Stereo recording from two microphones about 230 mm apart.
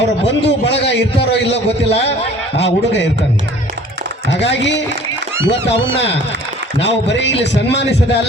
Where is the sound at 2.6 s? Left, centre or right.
Left.